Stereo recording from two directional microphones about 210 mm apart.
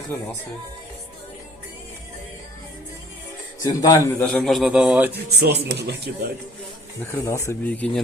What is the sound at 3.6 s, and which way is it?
Speech, 15° left (ahead or behind).